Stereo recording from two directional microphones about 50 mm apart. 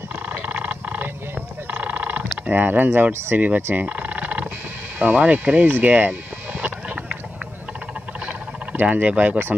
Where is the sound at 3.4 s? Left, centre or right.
Right.